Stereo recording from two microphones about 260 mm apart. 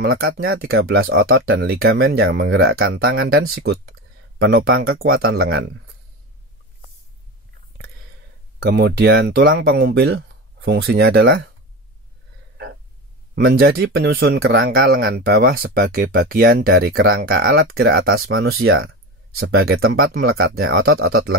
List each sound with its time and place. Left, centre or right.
0.0 s speech: right
8.5 s speech: right
13.3 s speech: right
18.3 s speech: right
19.3 s speech: right